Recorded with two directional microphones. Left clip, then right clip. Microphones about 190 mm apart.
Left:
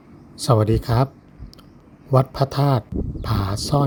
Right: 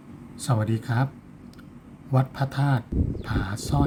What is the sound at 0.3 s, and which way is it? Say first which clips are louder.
Speech: left 10 dB; 50° left (ahead or behind).